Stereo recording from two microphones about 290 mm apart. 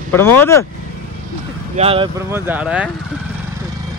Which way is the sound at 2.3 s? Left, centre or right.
Centre.